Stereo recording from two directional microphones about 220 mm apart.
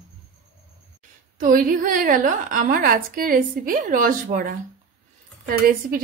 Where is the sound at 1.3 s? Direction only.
35° right (ahead or behind).